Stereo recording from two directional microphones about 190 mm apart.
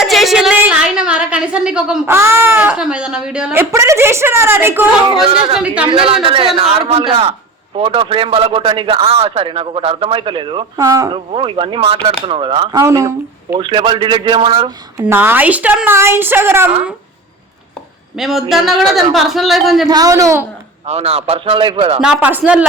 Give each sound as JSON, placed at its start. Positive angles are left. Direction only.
{"t": 0.0, "sound": "a sound", "side_deg": 0}
{"t": 5.0, "sound": "a man's voice", "side_deg": -30}
{"t": 5.5, "sound": "a woman's voice", "side_deg": -5}
{"t": 5.8, "sound": "a man's voice", "side_deg": -30}
{"t": 10.8, "sound": "a man's voice", "side_deg": -15}
{"t": 12.8, "sound": "a woman's voice", "side_deg": -15}
{"t": 13.6, "sound": "a man's voice", "side_deg": -25}
{"t": 15.0, "sound": "a woman's voice", "side_deg": -10}
{"t": 18.2, "sound": "a man's voice", "side_deg": 0}
{"t": 19.9, "sound": "a woman's voice", "side_deg": -20}
{"t": 20.8, "sound": "a man's voice", "side_deg": -35}
{"t": 22.0, "sound": "a woman's voice", "side_deg": -5}